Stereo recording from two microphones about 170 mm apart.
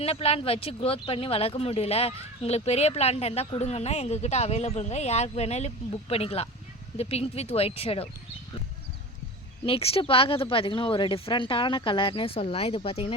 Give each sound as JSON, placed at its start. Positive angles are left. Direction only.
{"t": 0.0, "sound": "speech", "side_deg": 35}
{"t": 9.6, "sound": "speech", "side_deg": 35}